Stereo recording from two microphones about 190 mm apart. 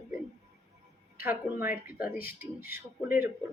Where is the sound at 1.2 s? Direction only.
10° right (ahead or behind).